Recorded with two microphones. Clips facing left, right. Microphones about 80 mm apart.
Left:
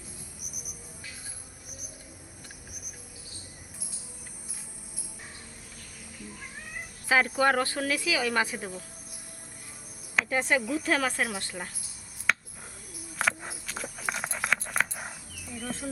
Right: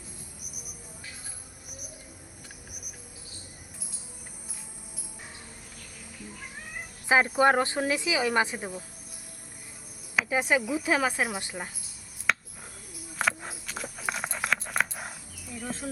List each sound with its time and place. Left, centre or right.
7.1 s speech: right
10.2 s speech: centre
12.3 s owl: centre
13.1 s horse: centre
15.5 s speech: centre